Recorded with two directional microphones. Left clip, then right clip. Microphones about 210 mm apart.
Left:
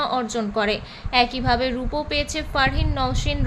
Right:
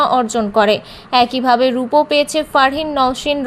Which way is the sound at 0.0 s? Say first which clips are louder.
Right 9 dB; 25° right (ahead or behind).